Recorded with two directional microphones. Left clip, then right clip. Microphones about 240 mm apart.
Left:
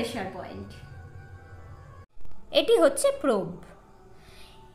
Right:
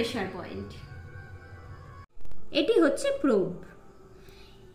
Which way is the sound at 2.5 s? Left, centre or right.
Left.